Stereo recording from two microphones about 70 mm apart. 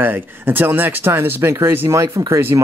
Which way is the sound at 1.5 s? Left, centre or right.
Right.